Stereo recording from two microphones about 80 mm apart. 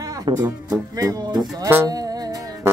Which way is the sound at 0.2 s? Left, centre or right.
Right.